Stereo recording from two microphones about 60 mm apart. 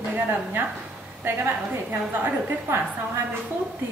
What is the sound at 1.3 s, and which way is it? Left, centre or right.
A woman's voice, right.